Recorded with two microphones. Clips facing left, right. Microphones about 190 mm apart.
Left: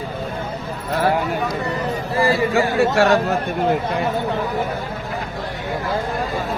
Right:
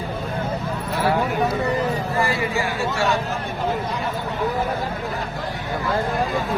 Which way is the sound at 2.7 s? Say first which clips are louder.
Left 7 dB; 65° left (ahead or behind).